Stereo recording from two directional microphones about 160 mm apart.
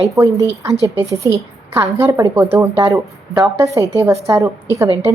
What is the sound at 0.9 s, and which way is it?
A woman's voice, 15° right (ahead or behind).